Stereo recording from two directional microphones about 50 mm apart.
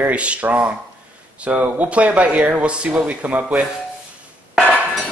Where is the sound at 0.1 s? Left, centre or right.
Right.